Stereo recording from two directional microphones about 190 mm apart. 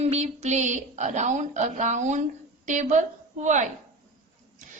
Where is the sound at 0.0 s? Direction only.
35° right (ahead or behind).